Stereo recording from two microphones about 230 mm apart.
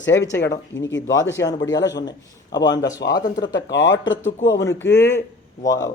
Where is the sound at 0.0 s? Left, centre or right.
Left.